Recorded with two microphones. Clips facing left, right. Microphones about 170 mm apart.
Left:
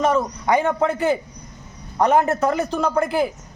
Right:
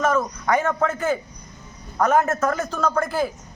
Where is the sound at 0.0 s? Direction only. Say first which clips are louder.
Left 2 dB; 15° left (ahead or behind).